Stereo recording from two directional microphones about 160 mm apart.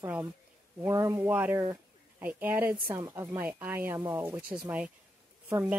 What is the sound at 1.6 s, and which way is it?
Bird, 25° right (ahead or behind).